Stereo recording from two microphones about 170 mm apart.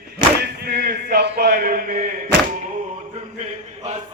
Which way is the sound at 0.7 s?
70° right (ahead or behind).